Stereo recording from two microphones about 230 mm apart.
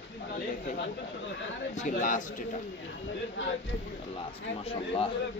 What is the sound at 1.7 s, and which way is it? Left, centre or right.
Speech, left.